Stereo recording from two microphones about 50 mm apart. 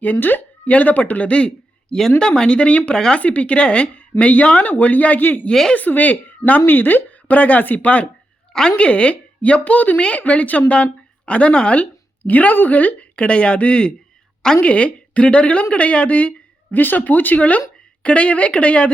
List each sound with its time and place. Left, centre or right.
0.0 s speech: left
2.9 s speech: centre
3.2 s a woman's voice: left
5.5 s speech: centre
5.7 s a woman's voice: left
18.0 s speech: left